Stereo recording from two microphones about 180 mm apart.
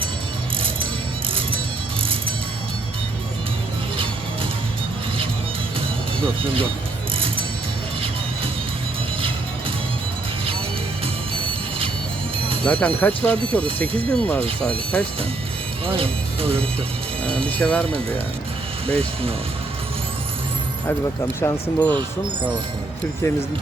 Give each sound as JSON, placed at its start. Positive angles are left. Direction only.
{"t": 1.3, "sound": "music", "side_deg": -30}
{"t": 6.4, "sound": "speech", "side_deg": -30}
{"t": 12.6, "sound": "speech", "side_deg": 5}
{"t": 15.9, "sound": "speech", "side_deg": -30}
{"t": 17.5, "sound": "speech", "side_deg": 5}
{"t": 18.9, "sound": "speech", "side_deg": -30}
{"t": 21.4, "sound": "speech", "side_deg": 10}